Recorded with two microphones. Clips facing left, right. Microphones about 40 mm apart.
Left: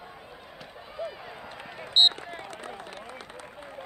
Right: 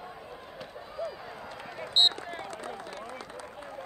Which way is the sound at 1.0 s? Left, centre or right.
Left.